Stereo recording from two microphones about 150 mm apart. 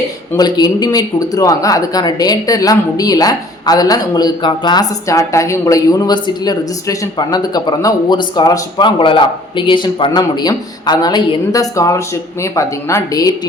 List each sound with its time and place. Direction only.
0.3 s speech: 30° left (ahead or behind)